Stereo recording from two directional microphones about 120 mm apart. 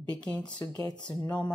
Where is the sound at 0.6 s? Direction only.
30° left (ahead or behind).